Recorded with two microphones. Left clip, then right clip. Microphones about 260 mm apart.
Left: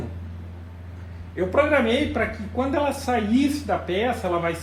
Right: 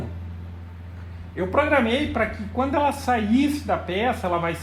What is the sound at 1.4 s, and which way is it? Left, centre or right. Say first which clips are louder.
Speech: even; right.